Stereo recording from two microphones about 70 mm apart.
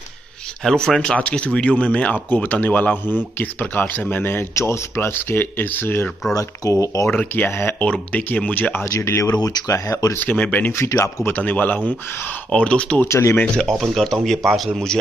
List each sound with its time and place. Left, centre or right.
0.7 s speech: centre; by 6.0 s left
6.3 s speech: left
7.1 s speech: left
7.8 s speech: left
8.9 s speech: left
9.3 s speech: left
9.8 s speech: left
10.1 s speech: left
10.7 s speech: left
11.2 s speech: left
13.1 s speech: left
13.7 s speech: centre